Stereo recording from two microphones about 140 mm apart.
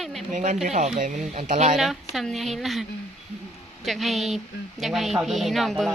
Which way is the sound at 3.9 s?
Centre (ahead or behind).